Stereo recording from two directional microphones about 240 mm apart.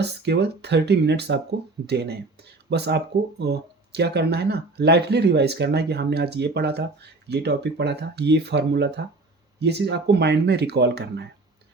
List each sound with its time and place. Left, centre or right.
0.0 s speech: right